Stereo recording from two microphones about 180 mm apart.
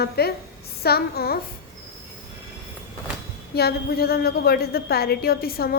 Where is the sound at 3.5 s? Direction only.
60° left (ahead or behind).